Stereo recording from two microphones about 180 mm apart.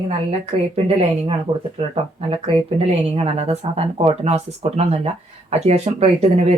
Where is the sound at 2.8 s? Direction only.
35° right (ahead or behind).